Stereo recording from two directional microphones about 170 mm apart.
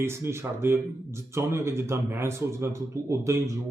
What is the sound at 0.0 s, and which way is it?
Speech, 15° right (ahead or behind).